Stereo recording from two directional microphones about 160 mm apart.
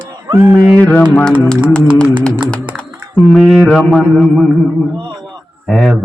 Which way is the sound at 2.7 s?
10° left (ahead or behind).